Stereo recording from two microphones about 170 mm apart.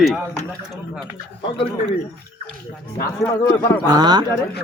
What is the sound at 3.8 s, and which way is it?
Speech, 25° right (ahead or behind).